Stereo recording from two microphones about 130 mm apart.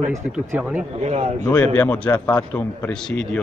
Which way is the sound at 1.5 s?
15° left (ahead or behind).